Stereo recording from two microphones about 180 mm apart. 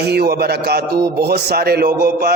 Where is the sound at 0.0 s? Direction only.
60° right (ahead or behind).